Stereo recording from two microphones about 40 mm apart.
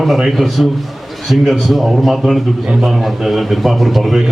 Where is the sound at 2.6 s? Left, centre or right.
Centre.